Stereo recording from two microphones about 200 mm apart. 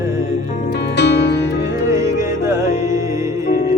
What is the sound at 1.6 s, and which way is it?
Music, 15° right (ahead or behind).